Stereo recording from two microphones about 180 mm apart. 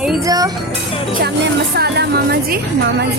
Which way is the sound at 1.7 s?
65° right (ahead or behind).